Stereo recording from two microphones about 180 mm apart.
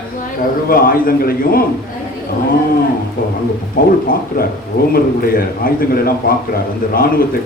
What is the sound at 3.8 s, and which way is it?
Speech, 50° left (ahead or behind).